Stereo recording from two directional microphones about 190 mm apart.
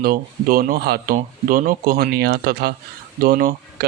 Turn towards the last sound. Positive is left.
turn(degrees=-50)  # may be behind; listen again after turning